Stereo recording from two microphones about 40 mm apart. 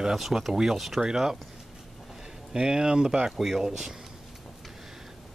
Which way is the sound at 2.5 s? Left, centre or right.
Centre.